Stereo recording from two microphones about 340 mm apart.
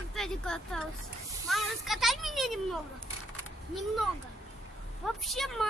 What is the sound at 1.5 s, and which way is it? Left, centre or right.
Speech, centre.